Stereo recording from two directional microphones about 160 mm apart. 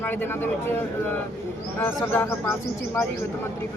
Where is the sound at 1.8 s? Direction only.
15° left (ahead or behind).